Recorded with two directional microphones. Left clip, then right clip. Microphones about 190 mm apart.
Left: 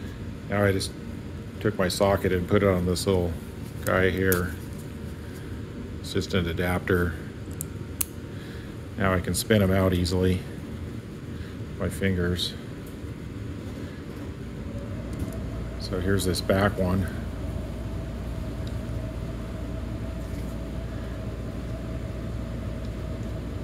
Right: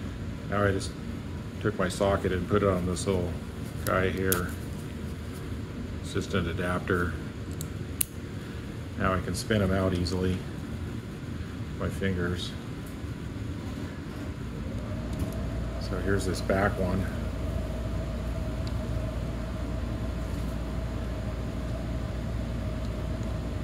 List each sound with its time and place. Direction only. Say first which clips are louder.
0.5 s speech: left 3 dB; 40° left (ahead or behind)
6.1 s speech: left 3 dB; 30° left (ahead or behind)
9.0 s speech: left 3 dB; 40° left (ahead or behind)
11.8 s speech: left 3 dB; 40° left (ahead or behind)
16.1 s speech: left 3 dB; 45° left (ahead or behind)